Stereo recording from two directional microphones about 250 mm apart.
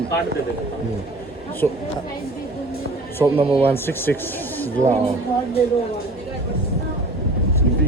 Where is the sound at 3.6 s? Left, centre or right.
Centre.